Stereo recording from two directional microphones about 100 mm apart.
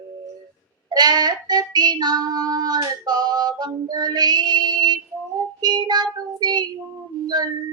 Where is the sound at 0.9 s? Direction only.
45° right (ahead or behind).